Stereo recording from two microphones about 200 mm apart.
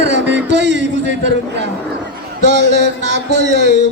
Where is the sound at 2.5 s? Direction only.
60° right (ahead or behind).